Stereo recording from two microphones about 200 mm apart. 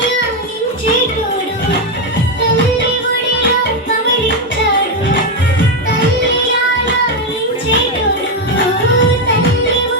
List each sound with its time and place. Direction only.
8.5 s music: 65° left (ahead or behind)